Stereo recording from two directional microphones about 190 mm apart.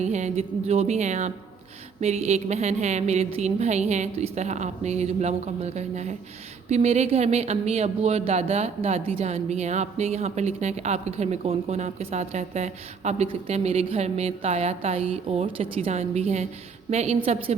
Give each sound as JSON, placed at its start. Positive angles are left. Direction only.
{"t": 0.0, "sound": "speech", "side_deg": -35}